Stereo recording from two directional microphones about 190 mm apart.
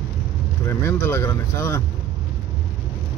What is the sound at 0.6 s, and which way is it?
Speech, 15° left (ahead or behind).